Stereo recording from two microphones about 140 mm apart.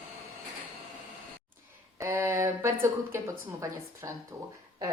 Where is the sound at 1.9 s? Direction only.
15° right (ahead or behind).